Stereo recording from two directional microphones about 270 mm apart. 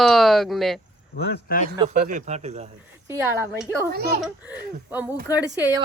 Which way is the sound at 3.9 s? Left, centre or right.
Right.